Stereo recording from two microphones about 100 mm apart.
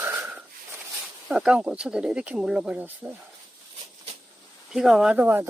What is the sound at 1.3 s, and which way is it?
Speech, 10° right (ahead or behind).